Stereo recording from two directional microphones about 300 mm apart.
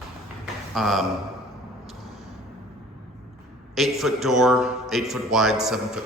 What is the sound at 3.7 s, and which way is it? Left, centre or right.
A man's voice, centre.